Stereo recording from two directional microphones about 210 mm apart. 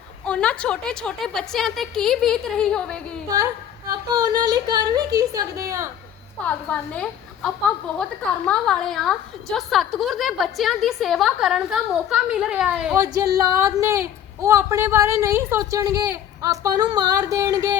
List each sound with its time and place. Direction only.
0.3 s a woman's voice: 5° left (ahead or behind)
3.2 s a woman's voice: 15° right (ahead or behind)
6.4 s a woman's voice: 5° left (ahead or behind); by 17.7 s 20° right (ahead or behind)